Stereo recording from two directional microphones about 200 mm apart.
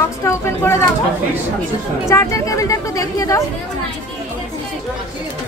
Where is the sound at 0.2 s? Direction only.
15° left (ahead or behind).